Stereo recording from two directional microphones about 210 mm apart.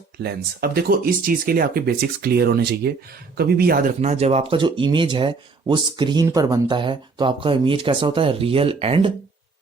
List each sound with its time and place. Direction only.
0.2 s speech: 50° right (ahead or behind); by 9.1 s 25° right (ahead or behind)